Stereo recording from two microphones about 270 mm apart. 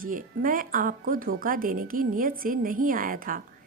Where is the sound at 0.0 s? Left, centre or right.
Right.